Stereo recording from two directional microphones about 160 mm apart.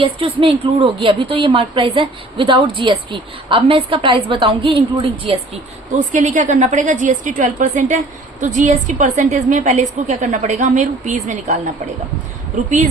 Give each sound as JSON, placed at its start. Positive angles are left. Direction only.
{"t": 0.0, "sound": "a woman's voice", "side_deg": -35}
{"t": 6.1, "sound": "a woman's voice", "side_deg": -50}